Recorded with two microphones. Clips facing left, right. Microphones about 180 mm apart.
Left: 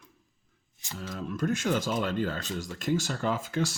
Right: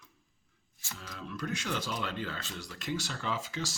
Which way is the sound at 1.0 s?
45° left (ahead or behind).